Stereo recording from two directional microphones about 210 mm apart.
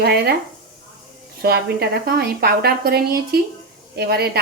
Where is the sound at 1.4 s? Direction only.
50° right (ahead or behind).